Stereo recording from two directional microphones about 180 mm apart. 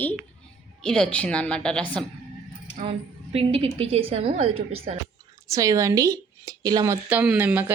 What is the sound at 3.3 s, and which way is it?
A woman's voice, 30° right (ahead or behind).